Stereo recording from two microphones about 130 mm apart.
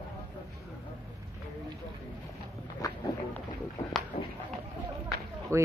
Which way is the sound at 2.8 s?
25° left (ahead or behind).